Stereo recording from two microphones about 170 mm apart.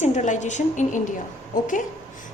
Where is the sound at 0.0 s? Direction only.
45° left (ahead or behind).